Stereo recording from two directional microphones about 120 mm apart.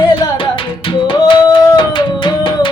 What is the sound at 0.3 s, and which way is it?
Music, 45° left (ahead or behind).